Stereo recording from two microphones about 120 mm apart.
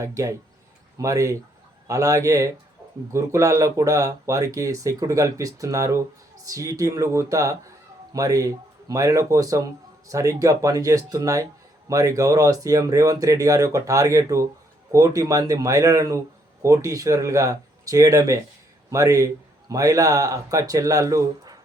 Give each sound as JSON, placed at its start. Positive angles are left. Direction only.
{"t": 0.0, "sound": "speech", "side_deg": -25}